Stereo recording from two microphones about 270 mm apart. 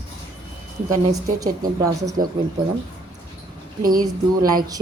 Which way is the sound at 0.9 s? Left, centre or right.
Centre.